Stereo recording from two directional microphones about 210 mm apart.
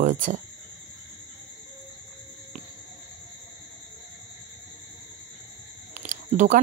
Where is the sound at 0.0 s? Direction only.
35° right (ahead or behind).